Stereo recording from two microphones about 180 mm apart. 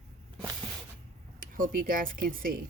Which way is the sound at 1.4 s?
50° right (ahead or behind).